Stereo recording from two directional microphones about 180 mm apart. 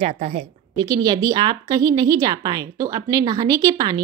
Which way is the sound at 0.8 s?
20° right (ahead or behind).